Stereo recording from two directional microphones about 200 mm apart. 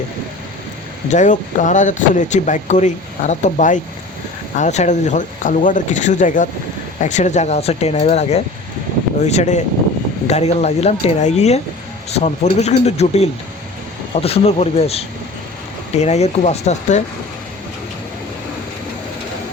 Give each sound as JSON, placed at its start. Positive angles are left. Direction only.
{"t": 1.1, "sound": "speech", "side_deg": 40}